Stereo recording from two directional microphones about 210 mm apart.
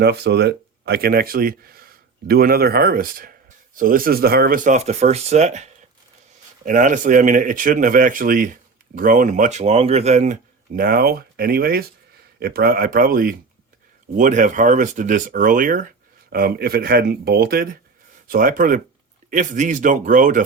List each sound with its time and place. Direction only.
0.0 s speech: 50° right (ahead or behind); by 10.3 s 35° right (ahead or behind)
10.8 s speech: 45° right (ahead or behind)